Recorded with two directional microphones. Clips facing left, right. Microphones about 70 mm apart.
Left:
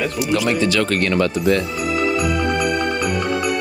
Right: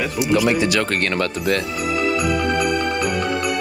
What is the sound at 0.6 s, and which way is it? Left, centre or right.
Speech, centre.